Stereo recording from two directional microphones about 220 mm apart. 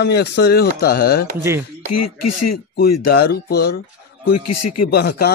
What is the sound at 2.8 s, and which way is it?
Speech, 45° left (ahead or behind).